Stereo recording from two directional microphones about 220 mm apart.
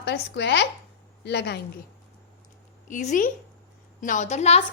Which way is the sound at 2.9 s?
35° left (ahead or behind).